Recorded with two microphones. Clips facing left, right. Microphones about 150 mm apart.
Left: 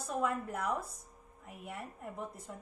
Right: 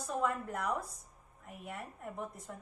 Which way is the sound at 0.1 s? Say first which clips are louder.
Even; 5° left (ahead or behind).